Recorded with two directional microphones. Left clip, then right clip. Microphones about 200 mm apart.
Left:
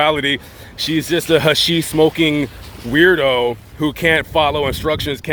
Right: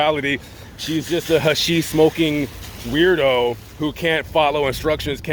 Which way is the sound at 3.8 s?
25° left (ahead or behind).